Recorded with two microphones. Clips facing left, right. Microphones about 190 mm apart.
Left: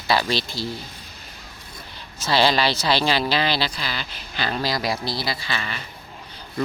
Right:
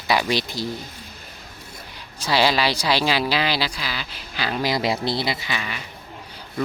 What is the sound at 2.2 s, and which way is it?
Speech, 10° right (ahead or behind).